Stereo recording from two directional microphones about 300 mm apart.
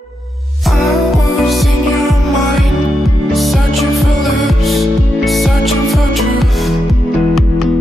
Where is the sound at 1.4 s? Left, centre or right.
Centre.